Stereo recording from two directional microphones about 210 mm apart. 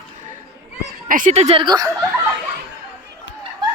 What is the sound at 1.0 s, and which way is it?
Speech, 40° right (ahead or behind).